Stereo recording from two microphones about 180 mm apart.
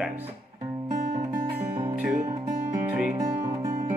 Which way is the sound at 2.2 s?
15° right (ahead or behind).